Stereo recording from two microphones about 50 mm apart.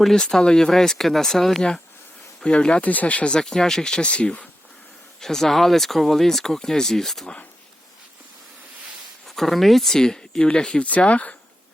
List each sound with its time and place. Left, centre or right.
0.0 s speech: centre
2.4 s speech: centre
2.8 s speech: left
3.3 s speech: centre
4.0 s speech: left
5.2 s speech: centre
9.2 s speech: centre
9.9 s speech: centre